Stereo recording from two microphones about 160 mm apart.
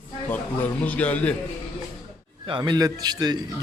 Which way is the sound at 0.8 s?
10° left (ahead or behind).